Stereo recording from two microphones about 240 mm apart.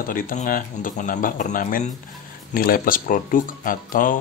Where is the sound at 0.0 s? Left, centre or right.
Left.